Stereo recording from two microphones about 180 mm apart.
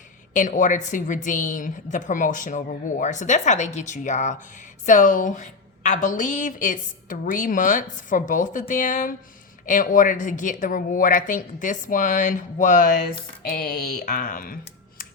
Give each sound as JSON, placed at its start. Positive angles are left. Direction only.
{"t": 0.3, "sound": "a woman's voice", "side_deg": 45}